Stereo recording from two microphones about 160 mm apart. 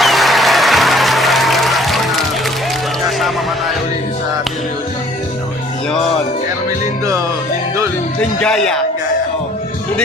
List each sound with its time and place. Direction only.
0.0 s applause: centre (ahead or behind)
3.0 s a sound: centre (ahead or behind)
7.0 s music: 20° right (ahead or behind)
8.2 s speech: 5° left (ahead or behind)